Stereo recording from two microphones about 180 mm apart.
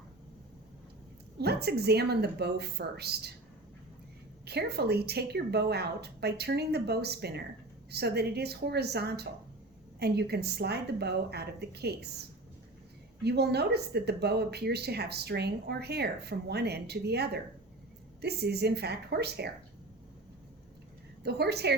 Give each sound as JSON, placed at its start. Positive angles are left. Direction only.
{"t": 1.4, "sound": "speech", "side_deg": -65}
{"t": 4.4, "sound": "speech", "side_deg": -65}
{"t": 13.2, "sound": "speech", "side_deg": -65}
{"t": 21.2, "sound": "speech", "side_deg": -65}